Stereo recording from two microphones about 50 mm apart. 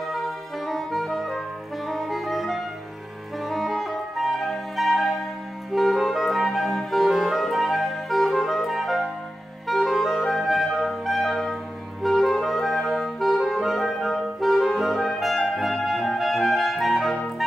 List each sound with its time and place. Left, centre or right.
0.1 s music: centre
1.9 s saxophone: centre
3.4 s music: centre
5.7 s clarinet: centre